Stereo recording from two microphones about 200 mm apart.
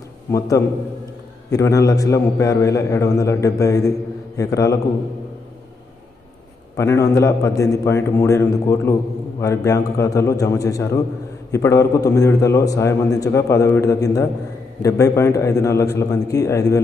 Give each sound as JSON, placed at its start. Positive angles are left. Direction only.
{"t": 0.3, "sound": "a man's voice", "side_deg": 15}
{"t": 6.8, "sound": "a man's voice", "side_deg": 15}